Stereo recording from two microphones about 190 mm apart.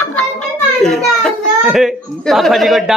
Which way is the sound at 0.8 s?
Centre (ahead or behind).